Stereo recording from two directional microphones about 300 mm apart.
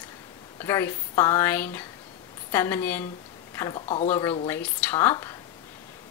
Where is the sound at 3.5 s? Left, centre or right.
Centre.